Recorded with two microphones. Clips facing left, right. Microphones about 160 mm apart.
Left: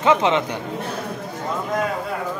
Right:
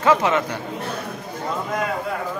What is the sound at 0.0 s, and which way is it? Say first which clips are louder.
Speech: left 1 dB; 20° left (ahead or behind).